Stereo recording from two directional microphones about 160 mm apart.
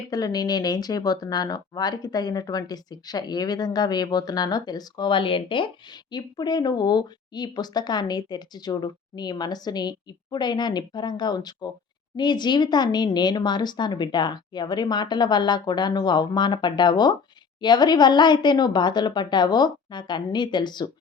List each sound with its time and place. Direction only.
0.1 s speech: 25° left (ahead or behind)